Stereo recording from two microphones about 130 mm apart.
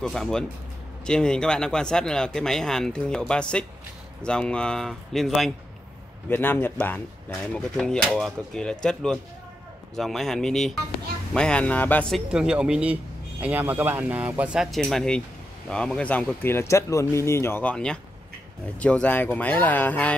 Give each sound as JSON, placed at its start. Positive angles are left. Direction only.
{"t": 0.0, "sound": "speech", "side_deg": 5}
{"t": 6.2, "sound": "speech", "side_deg": 15}
{"t": 12.1, "sound": "speech", "side_deg": -5}